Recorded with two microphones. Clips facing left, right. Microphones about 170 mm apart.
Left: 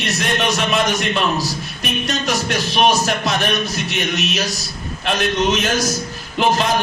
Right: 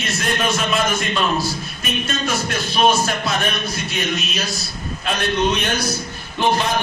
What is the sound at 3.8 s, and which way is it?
A man's voice, 80° left.